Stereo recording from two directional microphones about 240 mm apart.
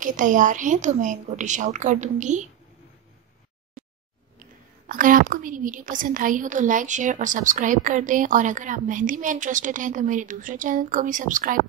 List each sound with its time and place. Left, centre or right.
0.0 s a woman's voice: right
4.8 s a woman's voice: right